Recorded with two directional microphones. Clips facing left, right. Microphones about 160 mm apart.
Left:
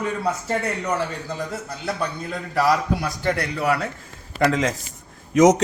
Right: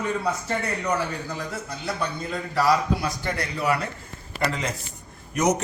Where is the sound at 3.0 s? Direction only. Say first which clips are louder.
Left 4 dB; 65° left (ahead or behind).